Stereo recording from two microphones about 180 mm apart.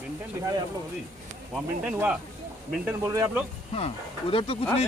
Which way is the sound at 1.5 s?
5° right (ahead or behind).